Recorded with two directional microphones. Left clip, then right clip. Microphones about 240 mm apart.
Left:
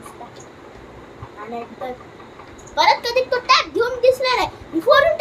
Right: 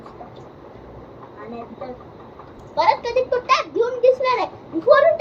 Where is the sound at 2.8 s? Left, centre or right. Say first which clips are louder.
Left 2 dB; centre.